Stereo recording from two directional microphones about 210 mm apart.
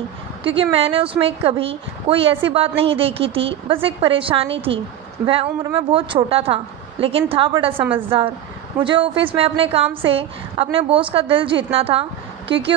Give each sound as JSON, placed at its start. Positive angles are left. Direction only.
{"t": 0.6, "sound": "a woman's voice", "side_deg": -25}